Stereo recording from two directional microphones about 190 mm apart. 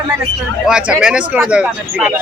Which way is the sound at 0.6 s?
5° right (ahead or behind).